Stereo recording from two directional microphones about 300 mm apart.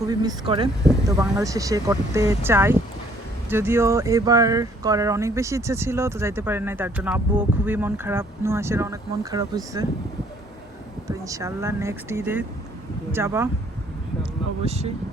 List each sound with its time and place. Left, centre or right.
0.0 s speech: centre
11.1 s speech: centre
14.6 s speech: right